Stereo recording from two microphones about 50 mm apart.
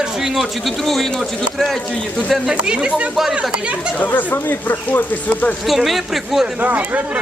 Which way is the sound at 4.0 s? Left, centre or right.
Left.